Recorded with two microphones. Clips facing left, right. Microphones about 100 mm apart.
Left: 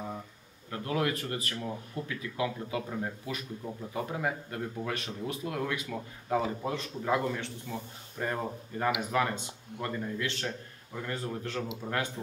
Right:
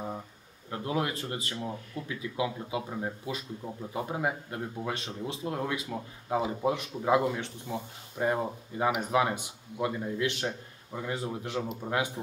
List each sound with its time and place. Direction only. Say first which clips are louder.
0.7 s a man's voice: even; 25° right (ahead or behind)